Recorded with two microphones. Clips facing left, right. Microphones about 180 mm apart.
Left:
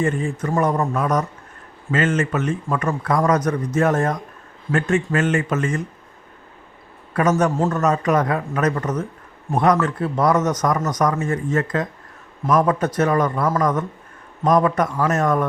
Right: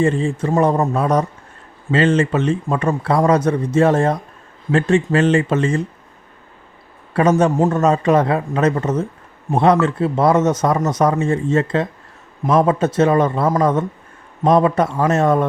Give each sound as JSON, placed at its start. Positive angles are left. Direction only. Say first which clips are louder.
{"t": 0.0, "sound": "a man's voice", "louder": "right 4 dB", "side_deg": -30}
{"t": 7.1, "sound": "a man's voice", "louder": "right 4 dB", "side_deg": -30}